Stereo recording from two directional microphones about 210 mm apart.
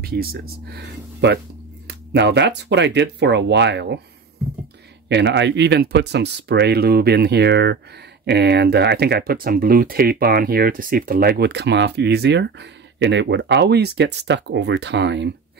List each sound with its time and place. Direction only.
0.0 s speech: 45° right (ahead or behind)
5.0 s speech: 55° right (ahead or behind)